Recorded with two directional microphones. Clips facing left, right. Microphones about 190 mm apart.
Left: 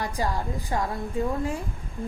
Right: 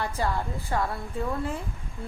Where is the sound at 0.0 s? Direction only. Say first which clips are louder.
Even; 15° left (ahead or behind).